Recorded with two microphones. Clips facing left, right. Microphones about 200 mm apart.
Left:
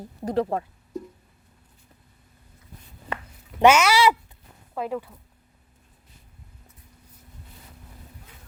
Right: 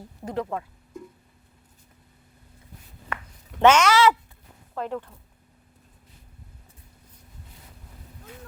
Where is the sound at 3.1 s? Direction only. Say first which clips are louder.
Left 2 dB; 30° left (ahead or behind).